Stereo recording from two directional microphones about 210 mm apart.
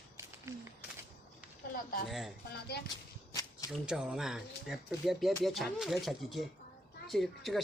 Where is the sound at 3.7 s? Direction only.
5° right (ahead or behind).